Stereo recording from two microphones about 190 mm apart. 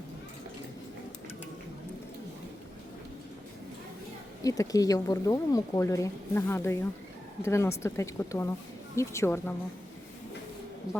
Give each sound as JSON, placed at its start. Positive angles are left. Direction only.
{"t": 4.4, "sound": "speech", "side_deg": 20}